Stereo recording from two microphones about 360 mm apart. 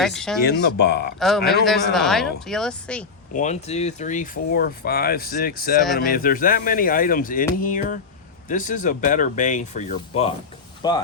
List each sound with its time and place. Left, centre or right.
0.0 s speech: centre
0.4 s speech: left
1.2 s speech: centre
3.3 s speech: centre